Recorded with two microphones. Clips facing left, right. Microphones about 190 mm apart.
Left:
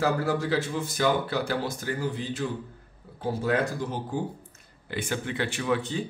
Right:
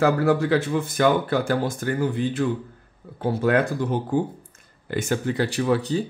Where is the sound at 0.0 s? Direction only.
60° right (ahead or behind).